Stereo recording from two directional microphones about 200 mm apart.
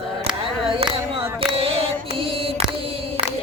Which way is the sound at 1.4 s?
25° right (ahead or behind).